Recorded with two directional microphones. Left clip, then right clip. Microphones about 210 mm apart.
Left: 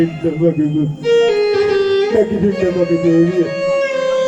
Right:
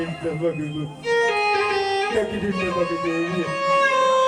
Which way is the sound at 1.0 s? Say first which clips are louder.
Left 7 dB; 35° left (ahead or behind).